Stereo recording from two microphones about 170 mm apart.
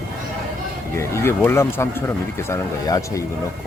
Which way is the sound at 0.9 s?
15° left (ahead or behind).